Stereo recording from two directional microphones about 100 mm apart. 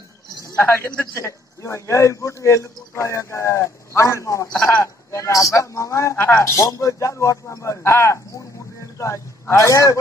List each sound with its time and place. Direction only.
1.1 s a man's voice: 30° left (ahead or behind)
4.5 s a man's voice: 20° left (ahead or behind)